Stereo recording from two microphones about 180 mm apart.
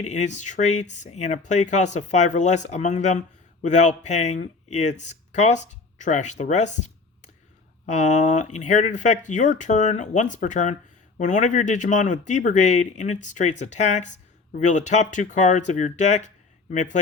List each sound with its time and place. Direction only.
0.0 s speech: 40° left (ahead or behind)